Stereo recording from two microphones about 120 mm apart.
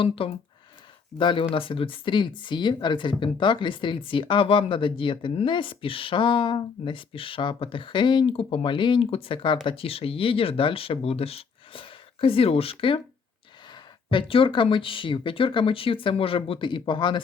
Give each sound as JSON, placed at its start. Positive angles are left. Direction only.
{"t": 0.0, "sound": "speech", "side_deg": 50}